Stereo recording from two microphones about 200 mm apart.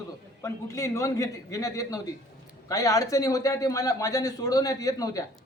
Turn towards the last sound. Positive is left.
turn(degrees=15)  # may be behind; listen again after turning